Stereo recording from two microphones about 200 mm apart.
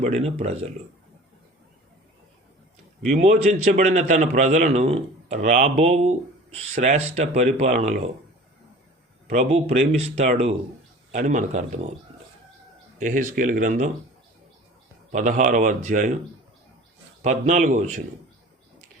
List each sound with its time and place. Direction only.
0.0 s a man's voice: 30° right (ahead or behind)
3.1 s a man's voice: 30° right (ahead or behind)
9.2 s a man's voice: 35° right (ahead or behind)
13.0 s a man's voice: 40° right (ahead or behind)
15.1 s a man's voice: 40° right (ahead or behind)
17.2 s a man's voice: 35° right (ahead or behind)